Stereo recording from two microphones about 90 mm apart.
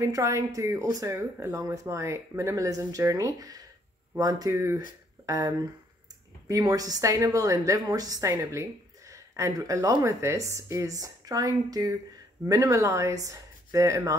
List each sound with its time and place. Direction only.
0.0 s speech: 35° right (ahead or behind)